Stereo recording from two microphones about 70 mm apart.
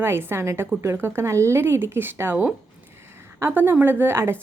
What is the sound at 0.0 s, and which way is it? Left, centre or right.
A woman's voice, right.